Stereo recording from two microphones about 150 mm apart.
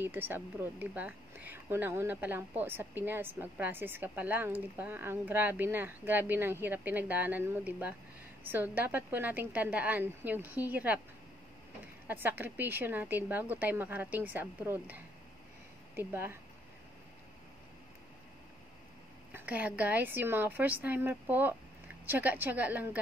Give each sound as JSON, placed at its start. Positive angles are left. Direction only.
{"t": 0.0, "sound": "speech", "side_deg": -15}
{"t": 12.1, "sound": "speech", "side_deg": -10}
{"t": 16.0, "sound": "speech", "side_deg": -15}
{"t": 19.3, "sound": "speech", "side_deg": -10}